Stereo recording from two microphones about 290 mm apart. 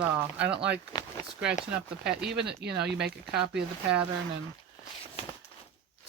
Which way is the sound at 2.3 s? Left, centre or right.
Right.